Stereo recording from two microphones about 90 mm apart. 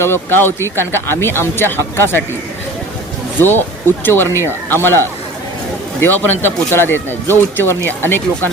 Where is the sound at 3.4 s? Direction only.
25° left (ahead or behind).